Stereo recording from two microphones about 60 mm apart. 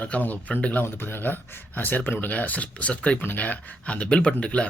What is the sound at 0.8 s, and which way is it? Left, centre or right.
Speech, left.